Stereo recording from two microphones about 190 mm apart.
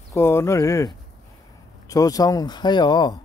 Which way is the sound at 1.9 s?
20° left (ahead or behind).